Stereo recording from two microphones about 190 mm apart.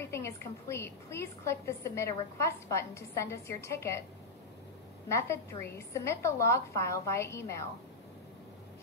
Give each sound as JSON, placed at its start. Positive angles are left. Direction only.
{"t": 0.0, "sound": "a woman's voice", "side_deg": 15}
{"t": 5.0, "sound": "a woman's voice", "side_deg": 15}